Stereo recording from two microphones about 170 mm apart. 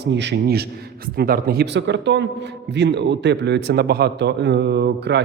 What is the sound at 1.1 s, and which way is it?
Speech, 65° right (ahead or behind).